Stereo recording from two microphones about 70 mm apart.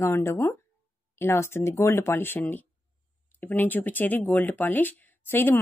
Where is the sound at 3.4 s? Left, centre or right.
Left.